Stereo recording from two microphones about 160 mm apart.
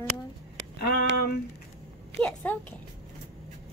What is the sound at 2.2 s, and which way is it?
Speech, 10° left (ahead or behind).